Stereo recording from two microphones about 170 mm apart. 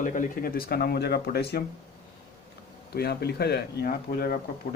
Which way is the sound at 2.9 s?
70° left (ahead or behind).